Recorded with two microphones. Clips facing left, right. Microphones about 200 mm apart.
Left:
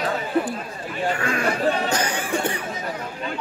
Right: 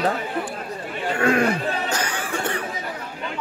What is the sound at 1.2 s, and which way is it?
Speech, 55° right (ahead or behind).